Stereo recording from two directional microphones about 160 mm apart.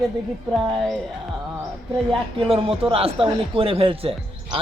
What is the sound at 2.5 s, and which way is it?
Speech, 35° right (ahead or behind).